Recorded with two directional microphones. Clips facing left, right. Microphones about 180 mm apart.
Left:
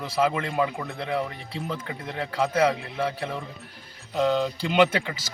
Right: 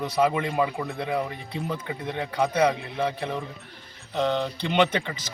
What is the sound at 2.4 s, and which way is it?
A man's voice, centre (ahead or behind).